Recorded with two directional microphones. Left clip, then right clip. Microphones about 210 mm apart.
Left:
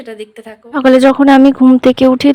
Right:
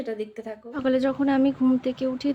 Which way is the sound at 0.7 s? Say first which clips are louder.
Left 16 dB; 50° left (ahead or behind).